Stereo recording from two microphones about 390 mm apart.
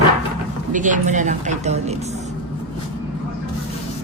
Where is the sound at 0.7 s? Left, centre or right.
Centre.